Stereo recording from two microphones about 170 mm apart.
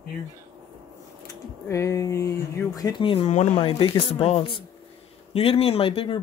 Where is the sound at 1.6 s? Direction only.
15° left (ahead or behind).